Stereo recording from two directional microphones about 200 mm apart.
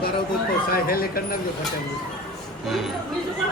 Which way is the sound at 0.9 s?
50° left (ahead or behind).